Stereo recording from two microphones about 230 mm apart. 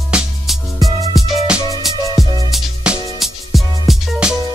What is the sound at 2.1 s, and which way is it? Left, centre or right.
Music, centre.